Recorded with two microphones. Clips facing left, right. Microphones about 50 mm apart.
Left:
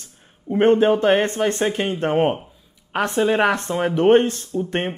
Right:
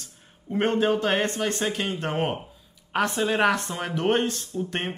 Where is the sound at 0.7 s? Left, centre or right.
Left.